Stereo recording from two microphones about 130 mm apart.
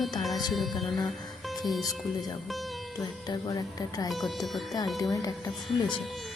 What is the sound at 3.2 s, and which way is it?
Speech, 30° left (ahead or behind).